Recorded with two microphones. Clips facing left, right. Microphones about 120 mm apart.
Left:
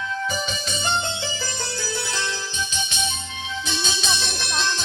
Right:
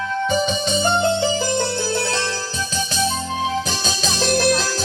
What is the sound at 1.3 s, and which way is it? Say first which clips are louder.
Music: right 11 dB; 20° right (ahead or behind).